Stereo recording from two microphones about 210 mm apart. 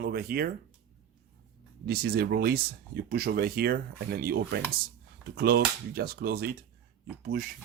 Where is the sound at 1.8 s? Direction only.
50° right (ahead or behind).